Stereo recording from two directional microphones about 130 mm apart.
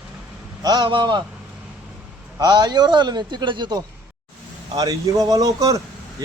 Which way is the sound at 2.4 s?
35° right (ahead or behind).